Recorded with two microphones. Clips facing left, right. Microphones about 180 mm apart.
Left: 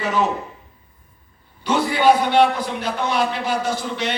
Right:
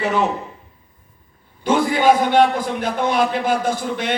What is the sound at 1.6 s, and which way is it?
A man's voice, 50° right (ahead or behind).